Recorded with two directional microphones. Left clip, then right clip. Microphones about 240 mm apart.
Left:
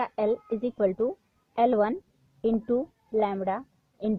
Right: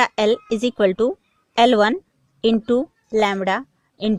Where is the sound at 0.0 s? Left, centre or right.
Right.